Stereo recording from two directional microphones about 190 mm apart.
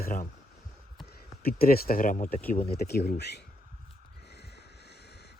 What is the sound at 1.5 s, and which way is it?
Speech, 50° left (ahead or behind).